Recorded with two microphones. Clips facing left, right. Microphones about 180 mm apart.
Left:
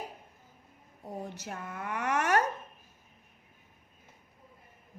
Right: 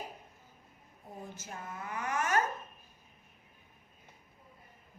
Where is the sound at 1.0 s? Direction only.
70° left (ahead or behind).